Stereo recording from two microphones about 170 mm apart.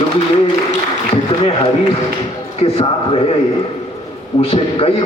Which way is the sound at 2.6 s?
35° left (ahead or behind).